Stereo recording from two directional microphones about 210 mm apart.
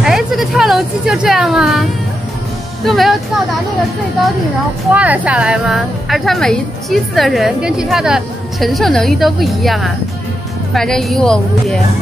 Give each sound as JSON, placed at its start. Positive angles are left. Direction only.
{"t": 0.0, "sound": "a sound", "side_deg": 0}
{"t": 2.8, "sound": "a woman's voice", "side_deg": 0}
{"t": 4.9, "sound": "a woman's voice", "side_deg": -5}